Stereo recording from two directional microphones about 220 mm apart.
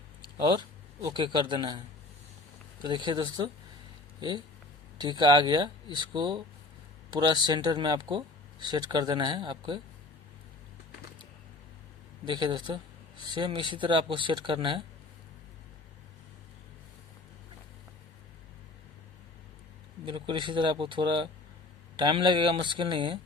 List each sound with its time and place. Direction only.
1.0 s speech: 20° right (ahead or behind)
2.8 s speech: 20° right (ahead or behind)
4.9 s speech: 20° right (ahead or behind)
12.2 s speech: 20° right (ahead or behind)
20.1 s speech: 20° right (ahead or behind)